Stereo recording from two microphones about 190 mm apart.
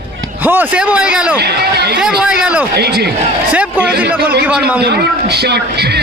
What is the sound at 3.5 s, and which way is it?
Speech, 5° right (ahead or behind).